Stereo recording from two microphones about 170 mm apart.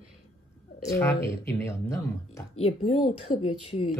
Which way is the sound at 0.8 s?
20° left (ahead or behind).